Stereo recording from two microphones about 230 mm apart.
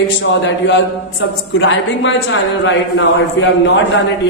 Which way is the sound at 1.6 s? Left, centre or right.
Left.